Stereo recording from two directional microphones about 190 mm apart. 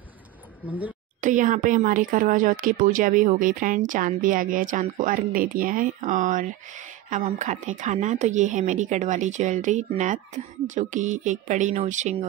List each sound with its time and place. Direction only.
0.7 s a woman's voice: 10° right (ahead or behind)
1.2 s a woman's voice: 40° right (ahead or behind)